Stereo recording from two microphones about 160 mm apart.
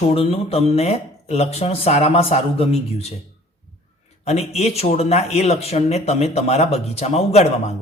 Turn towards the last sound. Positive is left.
turn(degrees=40)  # may be behind; listen again after turning